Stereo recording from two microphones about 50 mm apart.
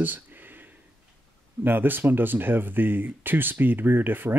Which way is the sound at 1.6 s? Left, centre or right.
Right.